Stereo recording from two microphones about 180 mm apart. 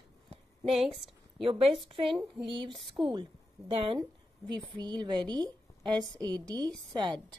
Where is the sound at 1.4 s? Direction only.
30° right (ahead or behind).